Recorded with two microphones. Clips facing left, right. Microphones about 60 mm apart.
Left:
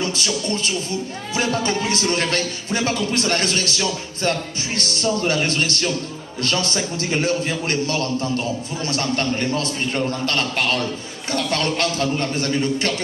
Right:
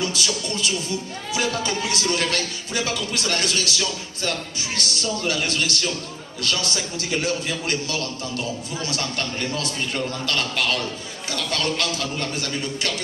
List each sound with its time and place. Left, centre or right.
0.0 s a man's voice: left